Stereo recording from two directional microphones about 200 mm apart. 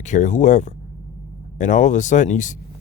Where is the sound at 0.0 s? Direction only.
35° left (ahead or behind).